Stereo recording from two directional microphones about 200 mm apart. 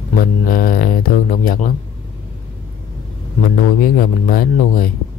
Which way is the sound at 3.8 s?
45° left (ahead or behind).